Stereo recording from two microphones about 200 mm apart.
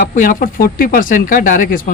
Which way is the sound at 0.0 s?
45° left (ahead or behind).